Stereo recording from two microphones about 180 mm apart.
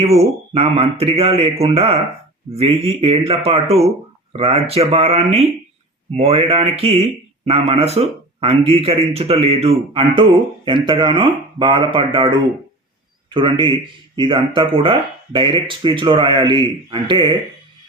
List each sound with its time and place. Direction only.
0.0 s speech: 35° right (ahead or behind)